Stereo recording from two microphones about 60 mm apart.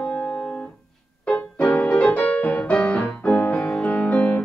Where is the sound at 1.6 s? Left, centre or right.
Left.